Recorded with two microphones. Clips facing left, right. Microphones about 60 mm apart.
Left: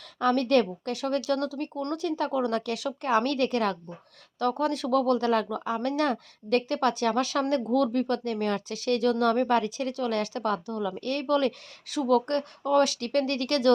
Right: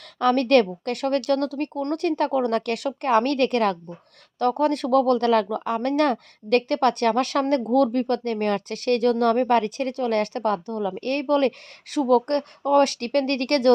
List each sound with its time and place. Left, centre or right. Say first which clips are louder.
0.2 s speech: right 5 dB; right